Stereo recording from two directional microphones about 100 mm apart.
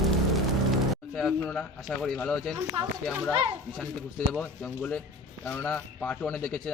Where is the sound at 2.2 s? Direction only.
10° left (ahead or behind).